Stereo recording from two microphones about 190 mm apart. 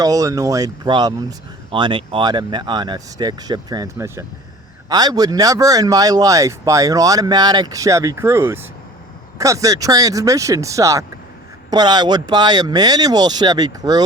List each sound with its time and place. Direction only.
0.0 s speech: 20° right (ahead or behind)